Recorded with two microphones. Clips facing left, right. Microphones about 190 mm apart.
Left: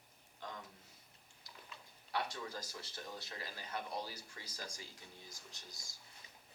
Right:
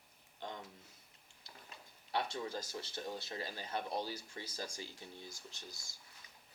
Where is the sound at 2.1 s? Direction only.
25° right (ahead or behind).